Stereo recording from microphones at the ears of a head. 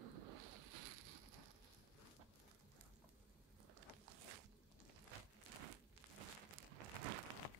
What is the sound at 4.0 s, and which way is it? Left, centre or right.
Walk, right.